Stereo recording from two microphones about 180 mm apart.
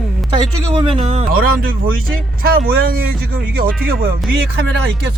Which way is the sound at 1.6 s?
55° right (ahead or behind).